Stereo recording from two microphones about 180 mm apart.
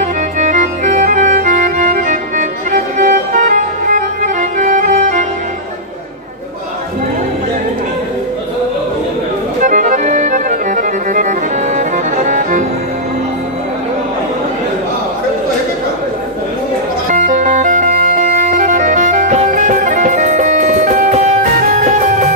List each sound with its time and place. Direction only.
0.0 s music: 40° right (ahead or behind)
9.6 s accordion: 45° right (ahead or behind)
17.1 s music: 45° right (ahead or behind)